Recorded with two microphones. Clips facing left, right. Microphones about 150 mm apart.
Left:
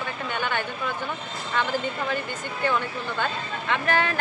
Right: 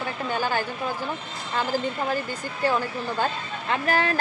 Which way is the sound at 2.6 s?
35° right (ahead or behind).